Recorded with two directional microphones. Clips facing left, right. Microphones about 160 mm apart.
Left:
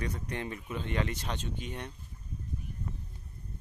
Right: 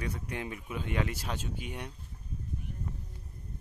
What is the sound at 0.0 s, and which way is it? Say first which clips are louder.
Speech: left 1 dB; 10° right (ahead or behind).